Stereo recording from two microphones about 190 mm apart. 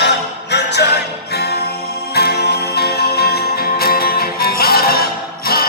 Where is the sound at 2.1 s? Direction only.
55° left (ahead or behind).